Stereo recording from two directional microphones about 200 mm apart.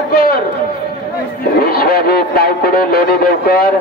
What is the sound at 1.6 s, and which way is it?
Speech, 50° left (ahead or behind).